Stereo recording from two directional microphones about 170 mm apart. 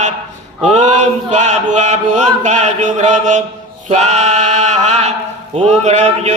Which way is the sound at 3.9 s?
45° right (ahead or behind).